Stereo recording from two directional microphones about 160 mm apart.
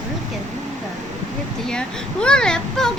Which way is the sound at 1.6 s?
5° left (ahead or behind).